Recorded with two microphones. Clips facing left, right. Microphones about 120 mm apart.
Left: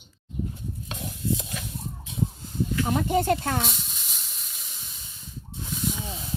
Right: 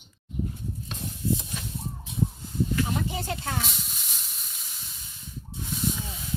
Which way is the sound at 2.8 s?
50° left (ahead or behind).